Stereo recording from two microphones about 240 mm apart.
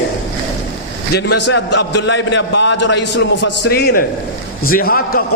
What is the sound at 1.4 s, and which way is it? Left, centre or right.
A man's voice, left.